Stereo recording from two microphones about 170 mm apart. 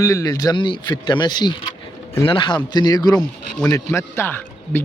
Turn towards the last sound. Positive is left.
turn(degrees=15)  # may be behind; listen again after turning